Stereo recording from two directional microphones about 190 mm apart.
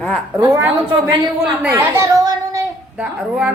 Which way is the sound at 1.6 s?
15° right (ahead or behind).